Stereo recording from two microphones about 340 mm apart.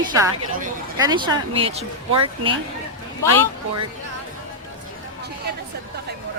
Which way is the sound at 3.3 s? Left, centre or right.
Right.